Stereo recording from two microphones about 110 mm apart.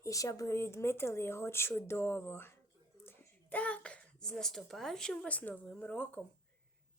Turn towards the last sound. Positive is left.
turn(degrees=15)  # may be behind; listen again after turning